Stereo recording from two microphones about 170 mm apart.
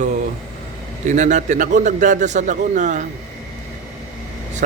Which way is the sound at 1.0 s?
45° right (ahead or behind).